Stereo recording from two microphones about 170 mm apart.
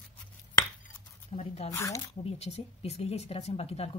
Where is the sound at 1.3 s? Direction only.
35° left (ahead or behind).